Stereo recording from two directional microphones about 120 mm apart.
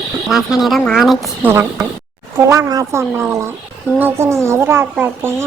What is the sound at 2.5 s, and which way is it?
Speech, 30° right (ahead or behind).